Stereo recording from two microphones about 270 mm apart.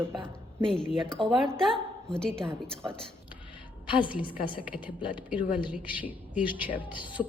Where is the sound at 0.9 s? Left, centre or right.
Centre.